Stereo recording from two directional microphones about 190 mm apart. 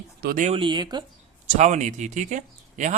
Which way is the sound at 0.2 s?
55° right (ahead or behind).